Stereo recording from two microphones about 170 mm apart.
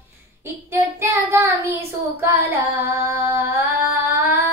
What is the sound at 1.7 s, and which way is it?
Female singing, 15° right (ahead or behind).